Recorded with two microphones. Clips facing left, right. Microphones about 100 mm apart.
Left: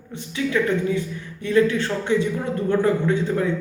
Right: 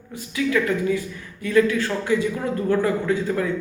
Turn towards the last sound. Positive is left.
turn(degrees=25)  # may be behind; listen again after turning